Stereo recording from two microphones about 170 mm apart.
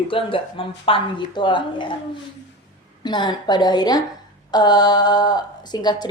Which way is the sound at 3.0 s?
25° left (ahead or behind).